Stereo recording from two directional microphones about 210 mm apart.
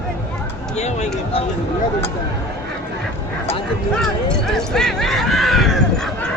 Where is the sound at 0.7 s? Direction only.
30° left (ahead or behind).